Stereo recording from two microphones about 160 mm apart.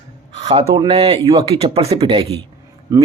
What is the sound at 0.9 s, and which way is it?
Speech, 35° right (ahead or behind).